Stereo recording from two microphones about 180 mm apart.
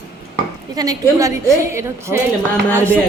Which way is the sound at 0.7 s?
20° right (ahead or behind).